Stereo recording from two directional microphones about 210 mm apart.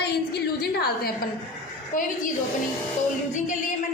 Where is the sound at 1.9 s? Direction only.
40° left (ahead or behind).